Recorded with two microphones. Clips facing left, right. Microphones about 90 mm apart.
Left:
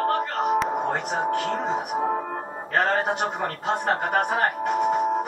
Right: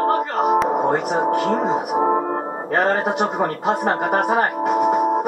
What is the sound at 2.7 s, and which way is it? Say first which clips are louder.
A man's voice: right 4 dB; 10° right (ahead or behind).